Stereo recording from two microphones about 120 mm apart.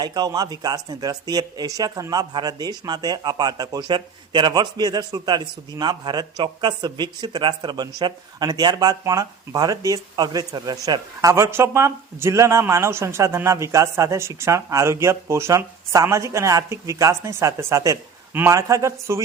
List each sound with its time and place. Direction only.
0.0 s speech: 35° right (ahead or behind)